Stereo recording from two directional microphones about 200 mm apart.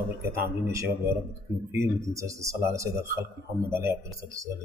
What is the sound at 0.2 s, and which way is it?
Speech, 15° right (ahead or behind).